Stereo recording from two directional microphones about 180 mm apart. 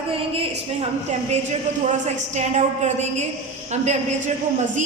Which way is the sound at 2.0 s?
40° right (ahead or behind).